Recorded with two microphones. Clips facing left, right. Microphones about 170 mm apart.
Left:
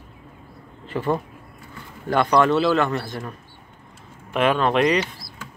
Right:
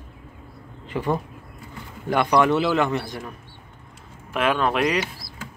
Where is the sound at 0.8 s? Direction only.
15° right (ahead or behind).